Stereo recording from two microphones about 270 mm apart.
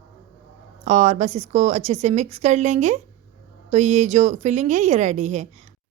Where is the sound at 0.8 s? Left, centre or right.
Right.